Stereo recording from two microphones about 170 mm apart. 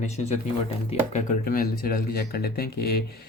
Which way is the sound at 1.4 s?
55° left (ahead or behind).